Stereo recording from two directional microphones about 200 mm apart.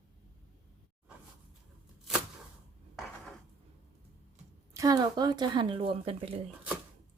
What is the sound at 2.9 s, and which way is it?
Dishes, centre (ahead or behind).